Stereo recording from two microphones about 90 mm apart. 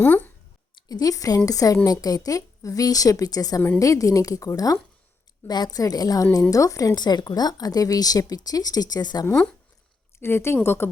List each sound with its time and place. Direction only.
0.0 s speech: 20° left (ahead or behind)
0.9 s a woman's voice: 45° left (ahead or behind)
10.2 s a woman's voice: 25° left (ahead or behind)